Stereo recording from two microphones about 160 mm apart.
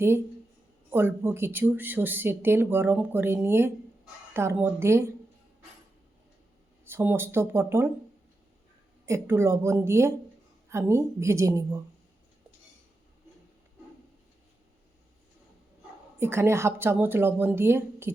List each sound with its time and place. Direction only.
0.9 s speech: 15° right (ahead or behind)
6.8 s speech: 15° right (ahead or behind)
9.0 s speech: 15° right (ahead or behind)
16.1 s speech: 15° right (ahead or behind)